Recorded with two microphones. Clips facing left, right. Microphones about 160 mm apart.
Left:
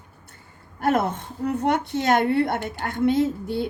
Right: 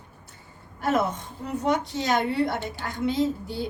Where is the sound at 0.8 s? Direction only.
60° left (ahead or behind).